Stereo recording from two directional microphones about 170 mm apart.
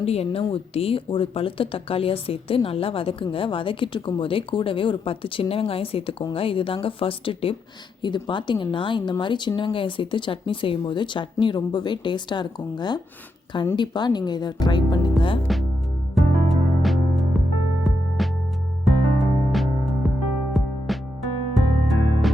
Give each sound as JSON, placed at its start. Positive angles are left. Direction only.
{"t": 0.0, "sound": "a woman's voice", "side_deg": 35}
{"t": 15.5, "sound": "music", "side_deg": 0}